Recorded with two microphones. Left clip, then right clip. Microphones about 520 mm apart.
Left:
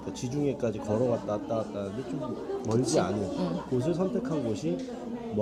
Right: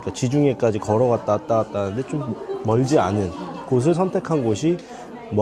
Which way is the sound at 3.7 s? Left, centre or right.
Right.